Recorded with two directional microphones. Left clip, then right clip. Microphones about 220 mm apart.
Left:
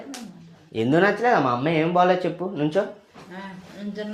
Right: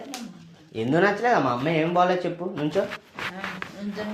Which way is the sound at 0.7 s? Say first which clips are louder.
Left 2 dB; 40° left (ahead or behind).